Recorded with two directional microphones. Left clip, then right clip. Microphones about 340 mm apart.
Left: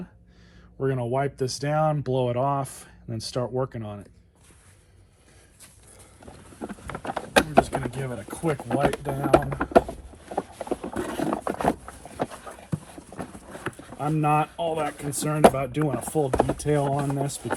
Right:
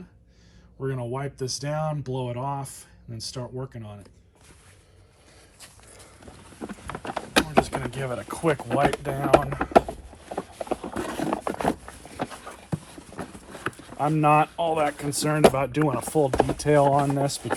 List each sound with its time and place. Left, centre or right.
0.8 s speech: centre
5.6 s a sound: centre
14.2 s speech: centre
14.4 s speech: centre